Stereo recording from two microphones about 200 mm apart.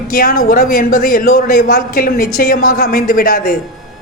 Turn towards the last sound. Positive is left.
turn(degrees=45)  # may be behind; listen again after turning